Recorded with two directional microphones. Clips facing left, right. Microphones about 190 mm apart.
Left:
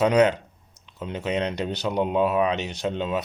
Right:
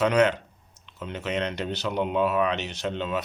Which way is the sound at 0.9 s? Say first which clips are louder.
Left 3 dB; 15° left (ahead or behind).